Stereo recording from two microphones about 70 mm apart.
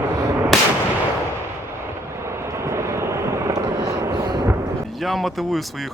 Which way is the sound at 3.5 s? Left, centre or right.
Right.